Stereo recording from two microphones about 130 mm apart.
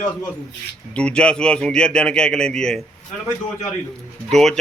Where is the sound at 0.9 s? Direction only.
10° left (ahead or behind).